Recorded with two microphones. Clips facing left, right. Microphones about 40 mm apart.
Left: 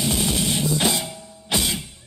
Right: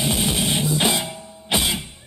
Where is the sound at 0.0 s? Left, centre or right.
Right.